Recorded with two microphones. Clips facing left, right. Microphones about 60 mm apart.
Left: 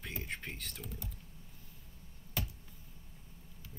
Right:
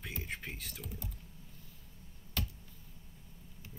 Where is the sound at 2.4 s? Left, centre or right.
Centre.